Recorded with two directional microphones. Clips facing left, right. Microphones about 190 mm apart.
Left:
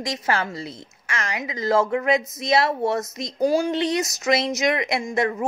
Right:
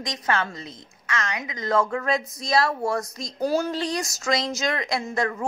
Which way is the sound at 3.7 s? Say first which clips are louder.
Left 5 dB; 25° left (ahead or behind).